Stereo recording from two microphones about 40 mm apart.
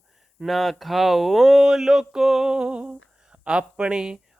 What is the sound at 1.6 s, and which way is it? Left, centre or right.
Speech, centre.